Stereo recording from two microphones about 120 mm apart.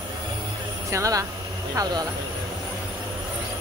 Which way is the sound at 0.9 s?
25° right (ahead or behind).